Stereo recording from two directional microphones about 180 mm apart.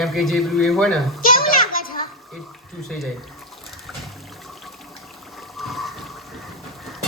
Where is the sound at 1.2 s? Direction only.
50° left (ahead or behind).